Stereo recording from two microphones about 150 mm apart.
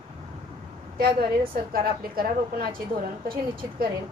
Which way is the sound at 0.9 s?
80° right.